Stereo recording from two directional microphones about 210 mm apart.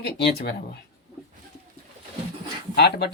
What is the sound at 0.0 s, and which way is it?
Speech, 50° left (ahead or behind).